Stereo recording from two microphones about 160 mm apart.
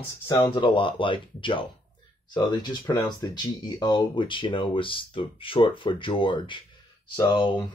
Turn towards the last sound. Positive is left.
turn(degrees=30)  # may be behind; listen again after turning